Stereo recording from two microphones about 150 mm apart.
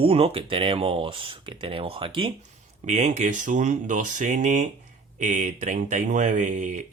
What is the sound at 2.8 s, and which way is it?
Speech, 50° right (ahead or behind).